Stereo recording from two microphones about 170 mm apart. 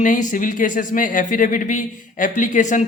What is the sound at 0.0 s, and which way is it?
A man's voice, 50° left (ahead or behind).